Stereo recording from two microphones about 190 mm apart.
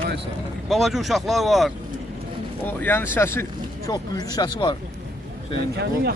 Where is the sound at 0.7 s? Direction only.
Centre (ahead or behind).